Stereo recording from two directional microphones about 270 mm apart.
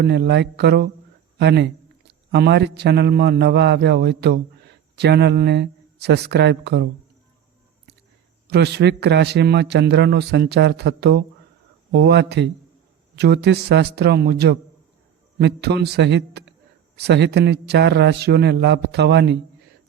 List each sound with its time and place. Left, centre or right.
0.0 s a man's voice: right
8.4 s a man's voice: right